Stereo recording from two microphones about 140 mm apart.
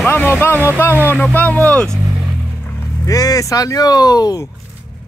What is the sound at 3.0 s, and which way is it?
Speech, 25° left (ahead or behind).